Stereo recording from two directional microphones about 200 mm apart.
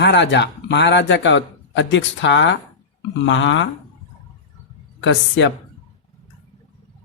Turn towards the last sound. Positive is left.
turn(degrees=70)  # may be behind; listen again after turning